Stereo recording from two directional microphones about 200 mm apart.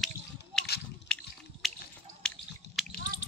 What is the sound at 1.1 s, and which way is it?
Drip, 5° left (ahead or behind).